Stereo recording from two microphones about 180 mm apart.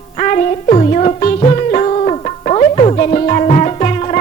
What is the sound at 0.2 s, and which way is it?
Music, 40° left (ahead or behind).